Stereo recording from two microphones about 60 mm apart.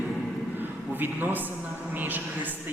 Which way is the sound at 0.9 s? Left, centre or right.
Right.